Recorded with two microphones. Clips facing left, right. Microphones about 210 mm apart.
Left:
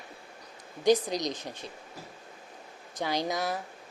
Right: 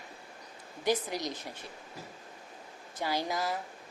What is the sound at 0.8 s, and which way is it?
Speech, 20° left (ahead or behind).